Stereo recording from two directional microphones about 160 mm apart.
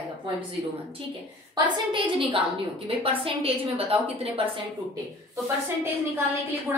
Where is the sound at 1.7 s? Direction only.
30° right (ahead or behind).